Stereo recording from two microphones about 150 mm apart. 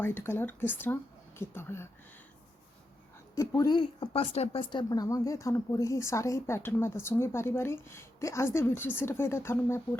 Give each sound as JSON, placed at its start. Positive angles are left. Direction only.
{"t": 0.0, "sound": "speech", "side_deg": 15}
{"t": 3.3, "sound": "speech", "side_deg": 20}